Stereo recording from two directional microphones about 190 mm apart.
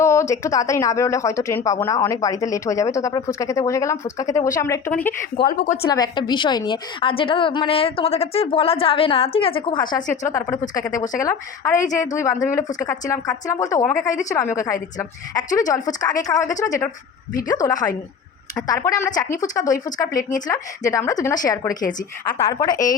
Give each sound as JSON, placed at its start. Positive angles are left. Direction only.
{"t": 0.0, "sound": "speech", "side_deg": 15}
{"t": 5.5, "sound": "a woman's voice", "side_deg": 45}
{"t": 5.9, "sound": "a woman's voice", "side_deg": 20}
{"t": 14.1, "sound": "a woman's voice", "side_deg": 40}
{"t": 14.3, "sound": "a woman's voice", "side_deg": 15}